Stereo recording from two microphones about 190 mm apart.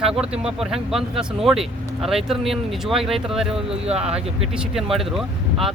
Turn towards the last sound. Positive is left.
turn(degrees=0)  # may be behind; listen again after turning